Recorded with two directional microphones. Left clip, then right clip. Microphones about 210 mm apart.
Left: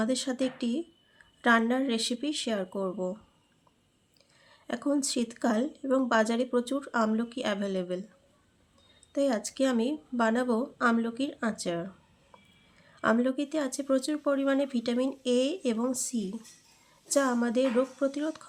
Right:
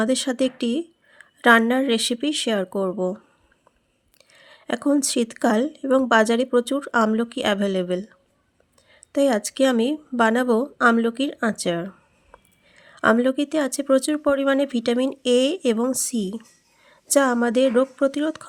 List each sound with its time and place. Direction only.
0.0 s a woman's voice: 45° right (ahead or behind)
4.3 s a woman's voice: 45° right (ahead or behind)
9.1 s a woman's voice: 45° right (ahead or behind)